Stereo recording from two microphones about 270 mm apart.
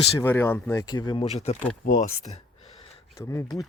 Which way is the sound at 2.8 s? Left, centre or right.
Centre.